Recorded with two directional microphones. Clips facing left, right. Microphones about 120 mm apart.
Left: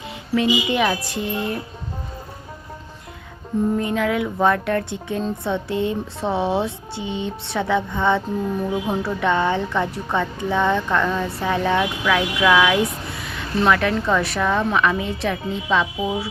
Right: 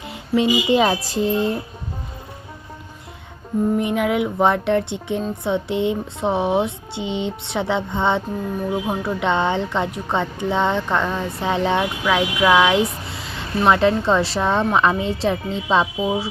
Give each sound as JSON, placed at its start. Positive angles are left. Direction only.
{"t": 0.3, "sound": "speech", "side_deg": -30}
{"t": 1.1, "sound": "music", "side_deg": -30}
{"t": 3.8, "sound": "speech", "side_deg": -20}